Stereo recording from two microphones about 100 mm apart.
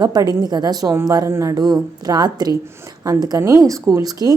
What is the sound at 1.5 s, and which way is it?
A woman's voice, 40° right (ahead or behind).